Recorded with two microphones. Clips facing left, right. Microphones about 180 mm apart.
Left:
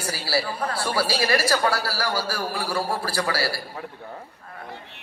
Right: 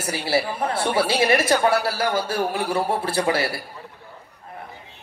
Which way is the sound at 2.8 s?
25° right (ahead or behind).